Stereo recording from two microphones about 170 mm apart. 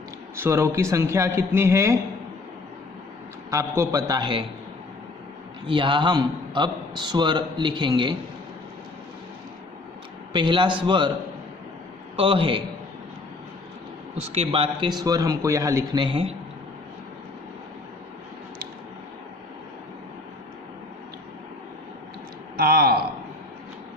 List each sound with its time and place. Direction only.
0.3 s a man's voice: 15° right (ahead or behind)
3.5 s a man's voice: 20° right (ahead or behind)
5.6 s a man's voice: 30° right (ahead or behind)
10.3 s a man's voice: 30° right (ahead or behind)
12.1 s a man's voice: 30° right (ahead or behind)
14.2 s a man's voice: 35° right (ahead or behind); by 16.0 s 20° right (ahead or behind)
16.0 s a man's voice: 35° right (ahead or behind)
22.5 s a sound: 65° right (ahead or behind)